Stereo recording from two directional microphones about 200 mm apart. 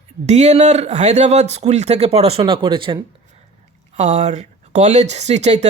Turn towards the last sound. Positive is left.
turn(degrees=-35)  # may be behind; listen again after turning